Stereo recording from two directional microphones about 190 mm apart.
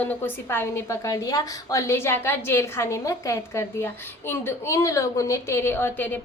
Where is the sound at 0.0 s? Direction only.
10° left (ahead or behind).